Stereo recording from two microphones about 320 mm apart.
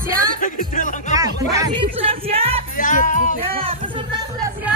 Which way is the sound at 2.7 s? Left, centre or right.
Left.